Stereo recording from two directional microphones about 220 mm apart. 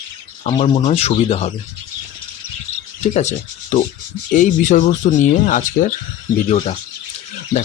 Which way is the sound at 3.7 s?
35° left (ahead or behind).